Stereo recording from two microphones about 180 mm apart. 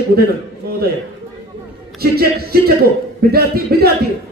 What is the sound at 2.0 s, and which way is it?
Speech, 60° right (ahead or behind).